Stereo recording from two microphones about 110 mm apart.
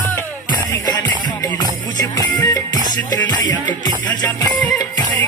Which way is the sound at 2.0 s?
35° left (ahead or behind).